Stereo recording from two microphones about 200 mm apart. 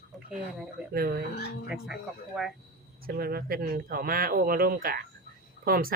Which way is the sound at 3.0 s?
50° right (ahead or behind).